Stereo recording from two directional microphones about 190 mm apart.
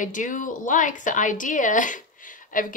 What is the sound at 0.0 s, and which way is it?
A woman's voice, 40° left (ahead or behind).